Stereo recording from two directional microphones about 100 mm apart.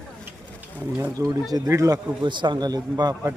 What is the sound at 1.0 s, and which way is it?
Speech, 35° right (ahead or behind).